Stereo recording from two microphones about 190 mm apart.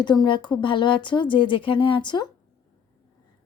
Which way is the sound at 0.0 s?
25° left (ahead or behind).